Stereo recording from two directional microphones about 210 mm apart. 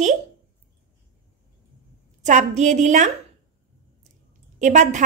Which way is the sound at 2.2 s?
35° right (ahead or behind).